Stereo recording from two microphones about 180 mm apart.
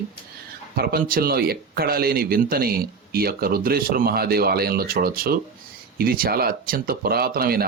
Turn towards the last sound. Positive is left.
turn(degrees=-55)  # may be behind; listen again after turning